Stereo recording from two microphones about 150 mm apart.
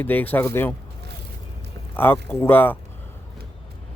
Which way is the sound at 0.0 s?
10° left (ahead or behind).